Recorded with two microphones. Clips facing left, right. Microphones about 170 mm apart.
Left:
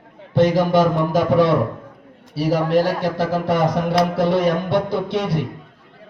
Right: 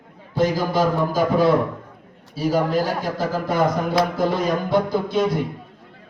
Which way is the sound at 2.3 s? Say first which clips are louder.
Left 2 dB; 80° left.